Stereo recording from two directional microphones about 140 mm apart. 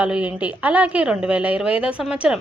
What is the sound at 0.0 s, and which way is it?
A woman's voice, 10° right (ahead or behind).